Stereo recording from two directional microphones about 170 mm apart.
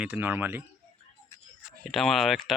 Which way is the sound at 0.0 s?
10° right (ahead or behind).